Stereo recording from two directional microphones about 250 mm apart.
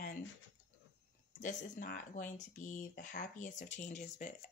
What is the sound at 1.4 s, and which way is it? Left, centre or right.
Speech, left.